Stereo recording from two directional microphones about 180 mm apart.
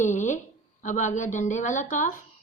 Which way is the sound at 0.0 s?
45° left (ahead or behind).